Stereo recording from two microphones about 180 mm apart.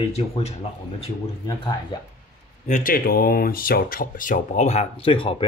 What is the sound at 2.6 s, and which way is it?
Speech, 45° left (ahead or behind).